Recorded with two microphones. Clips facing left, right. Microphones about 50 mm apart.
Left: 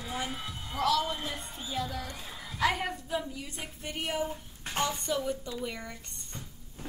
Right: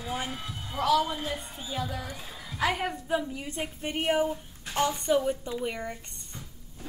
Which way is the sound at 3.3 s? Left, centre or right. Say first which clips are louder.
Right 6 dB; right.